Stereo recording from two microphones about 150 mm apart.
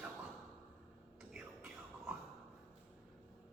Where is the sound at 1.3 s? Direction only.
5° right (ahead or behind).